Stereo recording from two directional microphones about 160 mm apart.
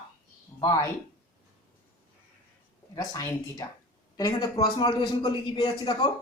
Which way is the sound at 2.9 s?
20° left (ahead or behind).